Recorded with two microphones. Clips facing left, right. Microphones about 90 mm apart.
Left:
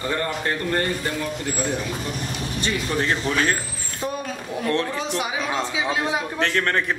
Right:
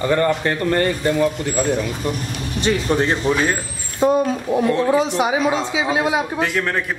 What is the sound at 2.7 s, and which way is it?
Speech, 30° right (ahead or behind).